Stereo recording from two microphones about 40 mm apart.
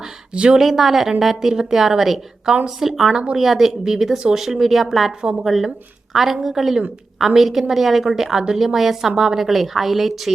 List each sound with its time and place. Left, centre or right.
0.3 s a woman's voice: right
0.6 s a woman's voice: centre
5.2 s a woman's voice: right
5.5 s a woman's voice: centre